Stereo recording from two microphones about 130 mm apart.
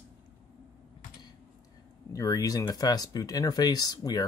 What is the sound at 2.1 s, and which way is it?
Speech, 25° left (ahead or behind).